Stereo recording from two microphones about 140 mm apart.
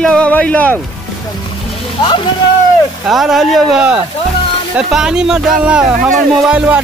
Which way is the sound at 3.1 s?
Centre (ahead or behind).